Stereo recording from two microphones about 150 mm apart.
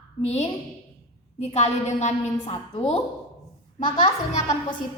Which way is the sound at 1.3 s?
50° left (ahead or behind).